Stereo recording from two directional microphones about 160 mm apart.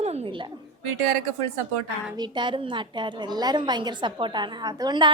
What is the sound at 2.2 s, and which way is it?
A woman's voice, 30° right (ahead or behind).